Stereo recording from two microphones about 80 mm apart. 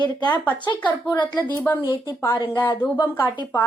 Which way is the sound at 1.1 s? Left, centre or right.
Left.